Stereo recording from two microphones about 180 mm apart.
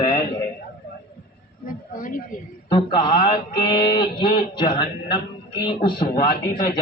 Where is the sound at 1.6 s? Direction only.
50° left (ahead or behind).